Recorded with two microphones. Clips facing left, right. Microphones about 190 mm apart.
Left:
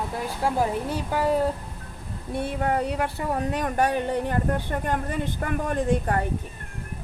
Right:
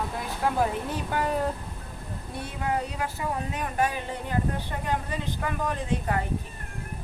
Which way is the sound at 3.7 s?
60° left (ahead or behind).